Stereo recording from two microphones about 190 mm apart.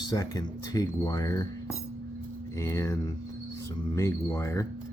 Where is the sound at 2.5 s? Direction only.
15° left (ahead or behind).